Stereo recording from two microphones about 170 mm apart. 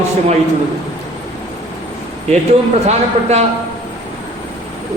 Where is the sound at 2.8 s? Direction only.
40° right (ahead or behind).